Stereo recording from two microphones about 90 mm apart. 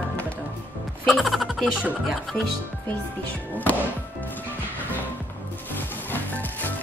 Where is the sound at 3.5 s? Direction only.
20° left (ahead or behind).